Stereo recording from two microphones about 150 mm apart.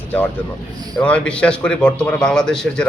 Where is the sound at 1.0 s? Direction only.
5° left (ahead or behind).